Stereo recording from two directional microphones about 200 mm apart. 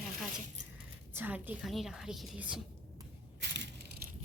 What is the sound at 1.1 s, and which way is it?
A woman's voice, 10° right (ahead or behind).